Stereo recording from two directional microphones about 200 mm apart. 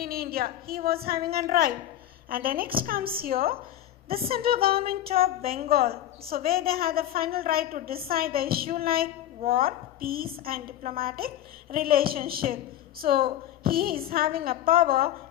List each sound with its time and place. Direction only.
0.0 s a woman's voice: 50° right (ahead or behind)